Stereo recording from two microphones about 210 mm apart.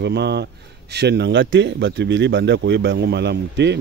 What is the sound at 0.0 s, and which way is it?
Speech, 55° right (ahead or behind).